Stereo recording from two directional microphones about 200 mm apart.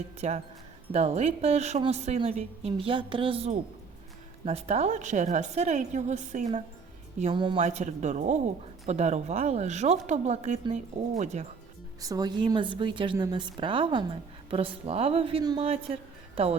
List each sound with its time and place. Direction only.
0.2 s a woman's voice: 35° right (ahead or behind)
7.6 s a woman's voice: 35° right (ahead or behind)
12.0 s a woman's voice: 20° right (ahead or behind)